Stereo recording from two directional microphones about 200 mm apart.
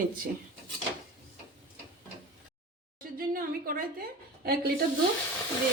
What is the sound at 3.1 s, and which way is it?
Speech, 45° right (ahead or behind).